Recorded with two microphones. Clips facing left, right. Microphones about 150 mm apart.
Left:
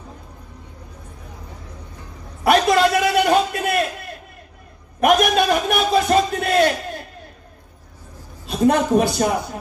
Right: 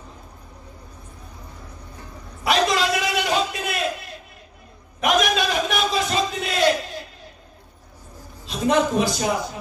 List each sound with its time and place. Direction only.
2.4 s a sound: 50° left (ahead or behind)
5.0 s a man's voice: 55° left (ahead or behind)
8.5 s a man's voice: 55° left (ahead or behind)